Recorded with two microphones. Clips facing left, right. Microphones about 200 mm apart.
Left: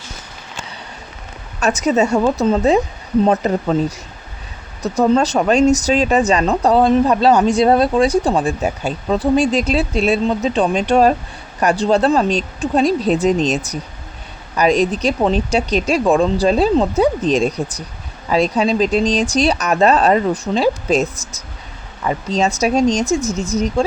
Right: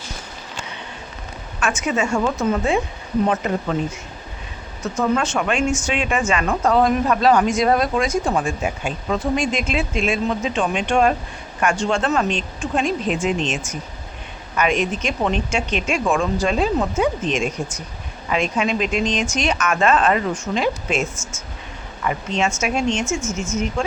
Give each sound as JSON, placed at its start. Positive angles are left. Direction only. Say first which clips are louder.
{"t": 1.5, "sound": "speech", "louder": "left 6 dB", "side_deg": 40}